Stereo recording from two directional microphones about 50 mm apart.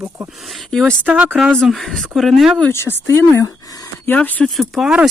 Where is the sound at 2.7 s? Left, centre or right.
Left.